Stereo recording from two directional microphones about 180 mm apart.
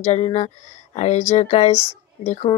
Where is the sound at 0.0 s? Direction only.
40° left (ahead or behind).